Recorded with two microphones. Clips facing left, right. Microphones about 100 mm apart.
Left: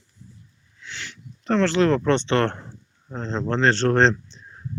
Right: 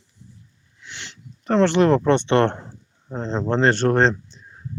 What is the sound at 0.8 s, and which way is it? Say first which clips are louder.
Speech: left 2 dB; 15° right (ahead or behind).